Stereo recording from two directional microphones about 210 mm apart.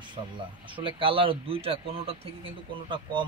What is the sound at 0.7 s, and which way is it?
Speech, 25° right (ahead or behind).